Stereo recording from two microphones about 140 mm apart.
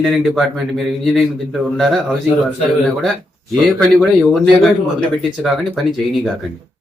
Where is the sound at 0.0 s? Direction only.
5° right (ahead or behind).